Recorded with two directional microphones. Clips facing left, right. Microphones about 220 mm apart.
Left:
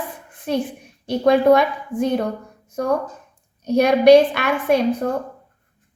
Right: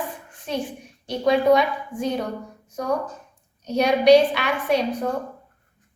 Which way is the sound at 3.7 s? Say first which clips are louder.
Left 4 dB; 50° left (ahead or behind).